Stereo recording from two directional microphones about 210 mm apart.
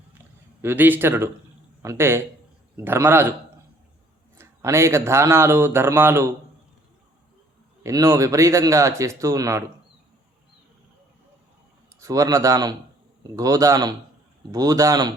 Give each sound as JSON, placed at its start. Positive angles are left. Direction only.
{"t": 0.6, "sound": "speech", "side_deg": -10}
{"t": 4.4, "sound": "speech", "side_deg": -10}
{"t": 7.9, "sound": "speech", "side_deg": -15}
{"t": 11.9, "sound": "speech", "side_deg": -15}